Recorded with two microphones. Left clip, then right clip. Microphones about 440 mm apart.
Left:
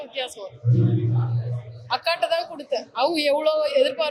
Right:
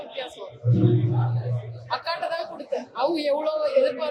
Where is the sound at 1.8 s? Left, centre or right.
Left.